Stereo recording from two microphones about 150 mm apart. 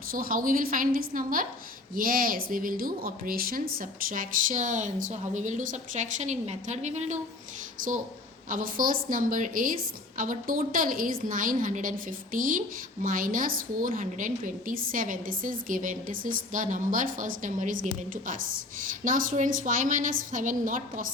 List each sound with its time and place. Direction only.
0.1 s a woman's voice: 70° right (ahead or behind); by 7.2 s 50° right (ahead or behind)
8.4 s a woman's voice: 65° right (ahead or behind)